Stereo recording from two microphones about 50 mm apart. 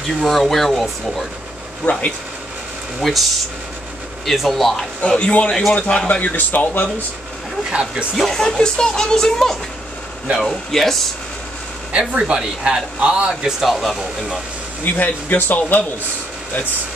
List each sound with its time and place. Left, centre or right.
0.2 s speech: centre
1.8 s speech: left
3.0 s speech: centre
4.3 s speech: centre
5.0 s a man's voice: centre
5.5 s speech: centre
5.9 s speech: left
7.7 s speech: centre
8.2 s speech: centre
11.9 s speech: centre
14.9 s speech: left